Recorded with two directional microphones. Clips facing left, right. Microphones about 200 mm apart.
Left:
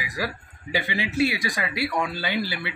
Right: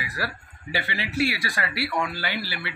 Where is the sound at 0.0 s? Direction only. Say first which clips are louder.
Left 2 dB; 15° left (ahead or behind).